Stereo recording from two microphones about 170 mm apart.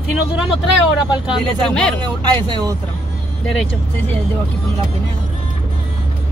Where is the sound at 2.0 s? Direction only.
25° right (ahead or behind).